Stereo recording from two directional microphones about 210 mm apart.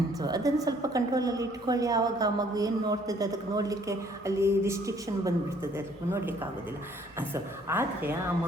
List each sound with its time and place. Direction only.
0.2 s a woman's voice: 15° right (ahead or behind)